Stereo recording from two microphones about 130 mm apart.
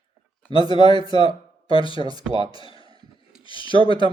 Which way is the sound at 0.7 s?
40° left (ahead or behind).